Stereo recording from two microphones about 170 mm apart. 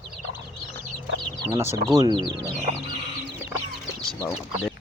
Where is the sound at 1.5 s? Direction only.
15° right (ahead or behind).